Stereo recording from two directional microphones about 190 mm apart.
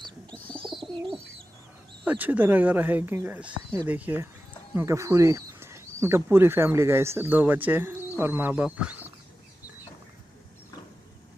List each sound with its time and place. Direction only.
0.6 s bird: 25° right (ahead or behind)
2.0 s speech: 10° right (ahead or behind)